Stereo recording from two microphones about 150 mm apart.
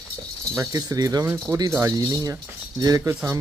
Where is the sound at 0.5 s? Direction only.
20° right (ahead or behind).